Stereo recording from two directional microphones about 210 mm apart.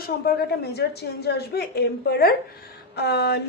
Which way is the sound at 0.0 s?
50° left (ahead or behind).